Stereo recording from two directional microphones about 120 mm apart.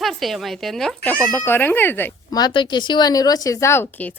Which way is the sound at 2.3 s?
40° left (ahead or behind).